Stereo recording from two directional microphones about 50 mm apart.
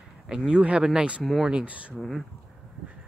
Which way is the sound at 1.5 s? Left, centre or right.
Right.